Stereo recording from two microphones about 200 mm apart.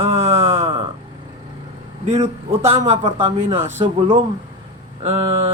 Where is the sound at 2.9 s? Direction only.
25° right (ahead or behind).